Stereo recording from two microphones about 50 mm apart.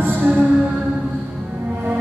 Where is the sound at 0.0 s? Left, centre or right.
Right.